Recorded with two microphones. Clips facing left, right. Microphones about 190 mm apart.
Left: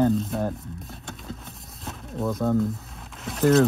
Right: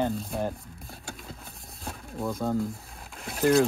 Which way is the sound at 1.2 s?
Centre (ahead or behind).